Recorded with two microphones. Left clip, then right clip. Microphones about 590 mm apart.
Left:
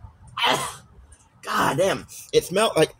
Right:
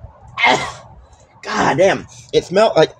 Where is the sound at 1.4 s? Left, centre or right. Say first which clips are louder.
Right 7 dB; left.